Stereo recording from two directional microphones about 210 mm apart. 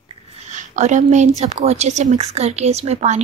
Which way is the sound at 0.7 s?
35° right (ahead or behind).